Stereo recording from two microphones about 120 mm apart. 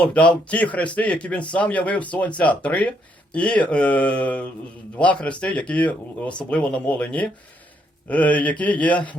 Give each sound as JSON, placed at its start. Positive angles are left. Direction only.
{"t": 0.0, "sound": "speech", "side_deg": 10}